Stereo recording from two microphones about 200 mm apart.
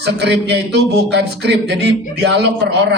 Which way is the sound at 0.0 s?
55° right (ahead or behind).